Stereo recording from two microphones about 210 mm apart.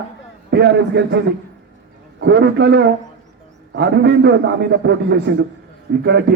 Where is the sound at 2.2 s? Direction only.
55° right (ahead or behind).